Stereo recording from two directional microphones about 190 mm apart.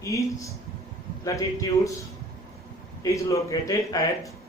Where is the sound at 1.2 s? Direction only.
15° left (ahead or behind).